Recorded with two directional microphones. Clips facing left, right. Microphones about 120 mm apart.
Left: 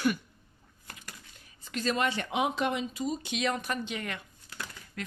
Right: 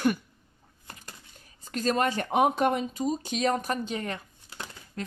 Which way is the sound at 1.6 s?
40° right (ahead or behind).